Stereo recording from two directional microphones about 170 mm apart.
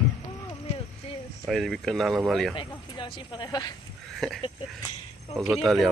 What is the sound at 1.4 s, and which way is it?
Speech, centre (ahead or behind).